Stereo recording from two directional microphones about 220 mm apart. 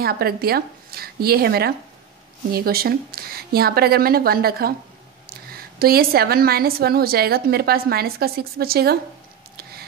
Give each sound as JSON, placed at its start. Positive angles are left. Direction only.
{"t": 0.0, "sound": "a woman's voice", "side_deg": -45}